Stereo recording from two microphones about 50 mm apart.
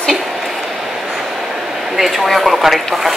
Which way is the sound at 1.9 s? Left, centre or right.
Centre.